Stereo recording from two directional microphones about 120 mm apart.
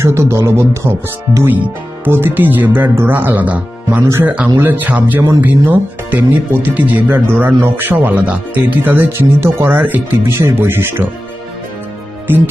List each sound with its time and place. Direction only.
0.0 s speech: 20° right (ahead or behind)
12.3 s speech: 15° right (ahead or behind)